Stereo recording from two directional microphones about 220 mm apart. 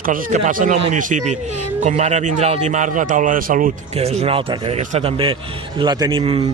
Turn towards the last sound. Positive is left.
turn(degrees=-25)  # may be behind; listen again after turning